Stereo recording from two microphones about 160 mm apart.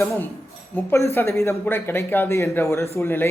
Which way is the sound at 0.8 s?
15° left (ahead or behind).